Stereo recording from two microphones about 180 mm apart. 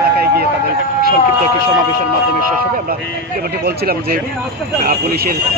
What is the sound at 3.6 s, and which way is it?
Speech, 55° right (ahead or behind).